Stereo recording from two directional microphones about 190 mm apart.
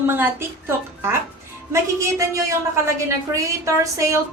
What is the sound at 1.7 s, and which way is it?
A woman's voice, 15° right (ahead or behind).